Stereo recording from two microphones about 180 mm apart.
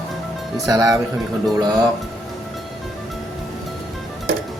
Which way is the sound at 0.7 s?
20° right (ahead or behind).